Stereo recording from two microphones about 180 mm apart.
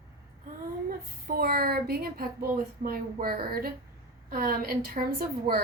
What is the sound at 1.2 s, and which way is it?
A woman's voice, 60° right (ahead or behind).